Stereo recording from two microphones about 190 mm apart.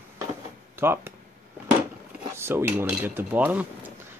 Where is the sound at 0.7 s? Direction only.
10° right (ahead or behind).